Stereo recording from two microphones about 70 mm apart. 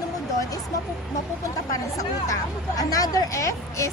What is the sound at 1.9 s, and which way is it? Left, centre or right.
Speech, left.